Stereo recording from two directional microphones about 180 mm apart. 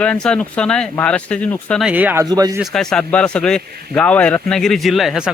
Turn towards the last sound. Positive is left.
turn(degrees=0)  # may be behind; listen again after turning